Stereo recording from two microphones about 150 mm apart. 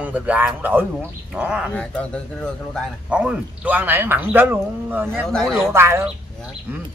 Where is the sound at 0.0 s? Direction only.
10° right (ahead or behind).